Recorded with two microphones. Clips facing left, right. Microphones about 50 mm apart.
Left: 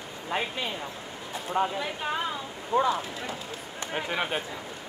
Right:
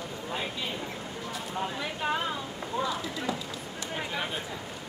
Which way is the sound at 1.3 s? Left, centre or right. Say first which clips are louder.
Left 7 dB; left.